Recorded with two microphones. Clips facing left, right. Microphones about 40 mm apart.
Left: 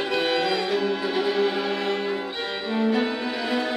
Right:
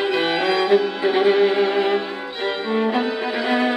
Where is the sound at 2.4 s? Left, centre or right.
Right.